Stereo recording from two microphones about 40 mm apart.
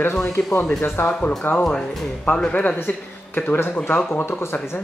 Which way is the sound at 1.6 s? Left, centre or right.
Centre.